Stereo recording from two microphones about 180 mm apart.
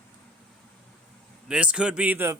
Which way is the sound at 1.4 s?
5° right (ahead or behind).